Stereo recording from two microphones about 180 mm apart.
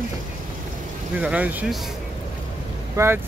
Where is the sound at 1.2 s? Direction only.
10° right (ahead or behind).